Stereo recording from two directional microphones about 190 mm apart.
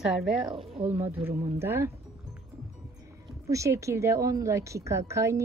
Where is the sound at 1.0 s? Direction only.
10° right (ahead or behind).